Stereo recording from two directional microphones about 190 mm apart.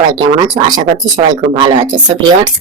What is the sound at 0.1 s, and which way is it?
Speech, 25° right (ahead or behind).